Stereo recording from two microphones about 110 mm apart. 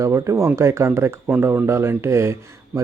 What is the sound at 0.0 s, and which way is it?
Speech, 25° right (ahead or behind).